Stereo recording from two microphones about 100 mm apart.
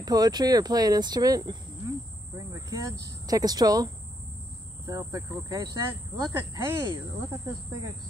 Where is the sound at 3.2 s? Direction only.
40° right (ahead or behind).